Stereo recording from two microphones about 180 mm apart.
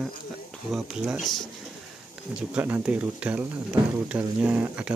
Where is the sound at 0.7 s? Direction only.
5° right (ahead or behind).